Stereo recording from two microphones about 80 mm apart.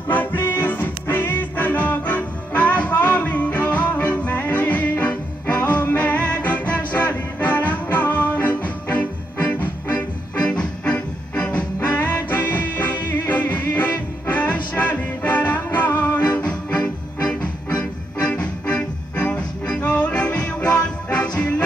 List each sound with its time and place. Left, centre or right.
0.1 s music: left
16.3 s music: centre
18.2 s music: centre